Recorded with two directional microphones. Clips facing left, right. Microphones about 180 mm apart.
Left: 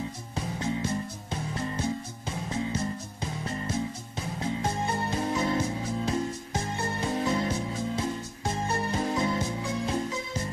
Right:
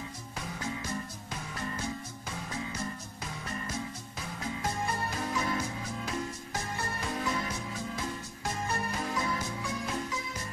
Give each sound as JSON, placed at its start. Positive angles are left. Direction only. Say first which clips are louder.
{"t": 0.6, "sound": "music", "louder": "left 7 dB", "side_deg": 25}